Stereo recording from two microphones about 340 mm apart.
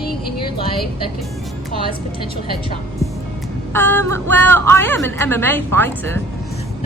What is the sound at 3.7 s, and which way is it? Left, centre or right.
A woman's voice, centre.